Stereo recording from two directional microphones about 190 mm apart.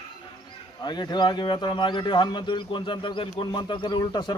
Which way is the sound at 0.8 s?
25° left (ahead or behind).